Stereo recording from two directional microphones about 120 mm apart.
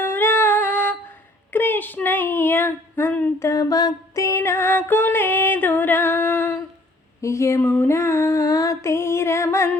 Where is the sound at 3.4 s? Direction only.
30° left (ahead or behind).